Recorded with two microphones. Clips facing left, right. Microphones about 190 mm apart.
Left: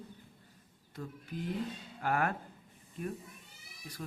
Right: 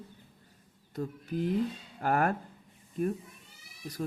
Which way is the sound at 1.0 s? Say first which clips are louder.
Right 8 dB; 40° right (ahead or behind).